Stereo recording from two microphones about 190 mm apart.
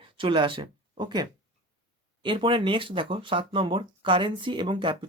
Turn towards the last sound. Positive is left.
turn(degrees=-25)  # may be behind; listen again after turning